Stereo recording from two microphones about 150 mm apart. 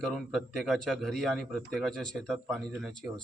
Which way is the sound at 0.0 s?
Centre (ahead or behind).